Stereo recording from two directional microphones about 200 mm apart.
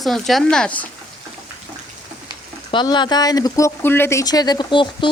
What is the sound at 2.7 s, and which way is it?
Speech, 20° left (ahead or behind).